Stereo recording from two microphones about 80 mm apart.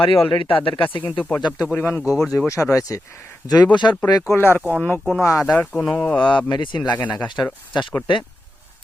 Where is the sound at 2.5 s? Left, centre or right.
Left.